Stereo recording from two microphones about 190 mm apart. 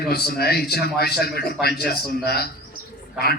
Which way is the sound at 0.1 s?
55° left (ahead or behind).